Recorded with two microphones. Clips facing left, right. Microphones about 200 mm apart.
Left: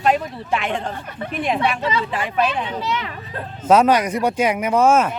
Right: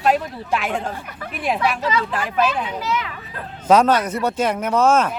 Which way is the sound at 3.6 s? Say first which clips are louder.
Left 1 dB; 5° left (ahead or behind).